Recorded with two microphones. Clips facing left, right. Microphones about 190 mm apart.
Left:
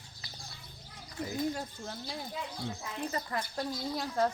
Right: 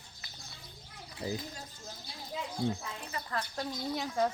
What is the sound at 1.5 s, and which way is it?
Speech, 65° left (ahead or behind).